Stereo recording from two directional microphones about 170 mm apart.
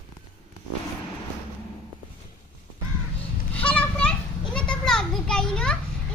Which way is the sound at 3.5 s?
10° left (ahead or behind).